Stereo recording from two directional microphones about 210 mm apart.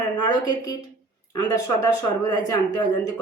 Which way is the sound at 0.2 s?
20° left (ahead or behind).